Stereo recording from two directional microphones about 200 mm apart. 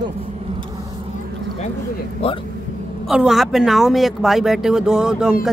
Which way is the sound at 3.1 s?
Centre (ahead or behind).